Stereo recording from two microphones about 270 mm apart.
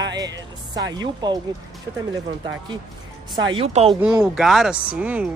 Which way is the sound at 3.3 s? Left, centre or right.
Centre.